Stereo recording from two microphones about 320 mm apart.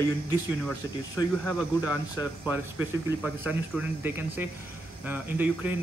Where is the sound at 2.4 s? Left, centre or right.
Centre.